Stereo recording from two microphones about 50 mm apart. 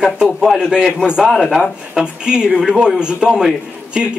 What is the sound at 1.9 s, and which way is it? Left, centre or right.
A man's voice, centre.